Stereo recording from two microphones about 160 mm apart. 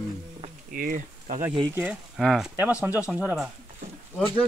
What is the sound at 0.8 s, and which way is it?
Speech, 55° right (ahead or behind).